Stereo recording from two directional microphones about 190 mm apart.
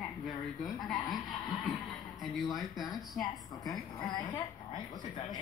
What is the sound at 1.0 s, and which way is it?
Speech, 20° left (ahead or behind).